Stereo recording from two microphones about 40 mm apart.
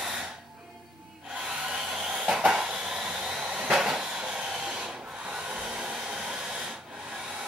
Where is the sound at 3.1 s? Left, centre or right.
Right.